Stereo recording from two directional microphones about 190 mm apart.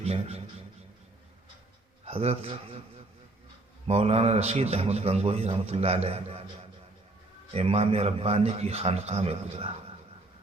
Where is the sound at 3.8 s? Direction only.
30° right (ahead or behind).